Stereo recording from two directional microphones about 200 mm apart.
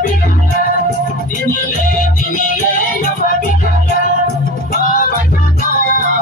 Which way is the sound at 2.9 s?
40° left (ahead or behind).